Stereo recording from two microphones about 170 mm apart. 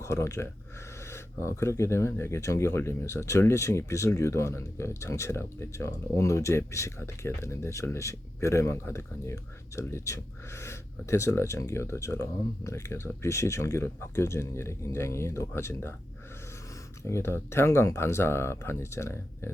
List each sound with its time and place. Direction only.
0.0 s speech: 15° left (ahead or behind)
17.0 s speech: 15° left (ahead or behind)